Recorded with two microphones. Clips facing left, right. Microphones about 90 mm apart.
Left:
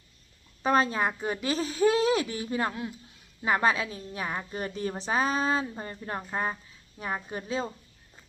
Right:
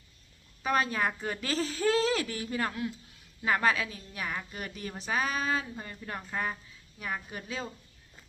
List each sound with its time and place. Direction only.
0.6 s a woman's voice: 30° left (ahead or behind)